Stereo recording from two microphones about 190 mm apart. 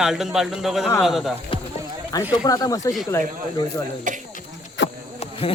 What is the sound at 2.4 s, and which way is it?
Speech, 20° left (ahead or behind).